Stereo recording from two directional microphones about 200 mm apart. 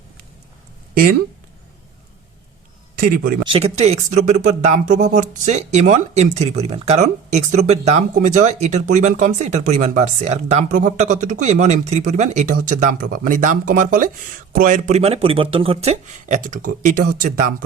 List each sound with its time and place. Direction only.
3.0 s speech: 50° right (ahead or behind)
3.5 s speech: 30° right (ahead or behind)